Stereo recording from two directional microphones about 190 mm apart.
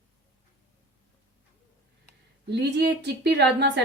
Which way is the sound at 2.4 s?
65° right (ahead or behind).